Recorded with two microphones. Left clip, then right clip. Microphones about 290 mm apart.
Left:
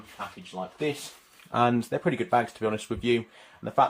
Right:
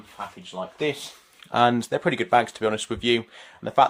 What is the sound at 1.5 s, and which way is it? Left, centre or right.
Speech, right.